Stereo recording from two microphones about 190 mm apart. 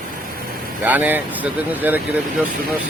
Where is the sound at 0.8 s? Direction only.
10° right (ahead or behind).